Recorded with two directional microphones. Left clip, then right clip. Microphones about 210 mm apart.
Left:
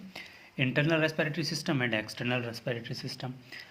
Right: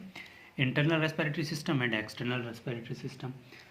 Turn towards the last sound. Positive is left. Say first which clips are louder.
# left 5 dB
turn(degrees=40)  # may be behind; listen again after turning